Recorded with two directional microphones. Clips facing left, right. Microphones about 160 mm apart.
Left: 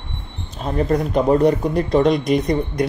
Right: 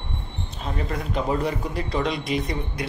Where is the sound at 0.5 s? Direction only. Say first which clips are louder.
Left 11 dB; 45° left (ahead or behind).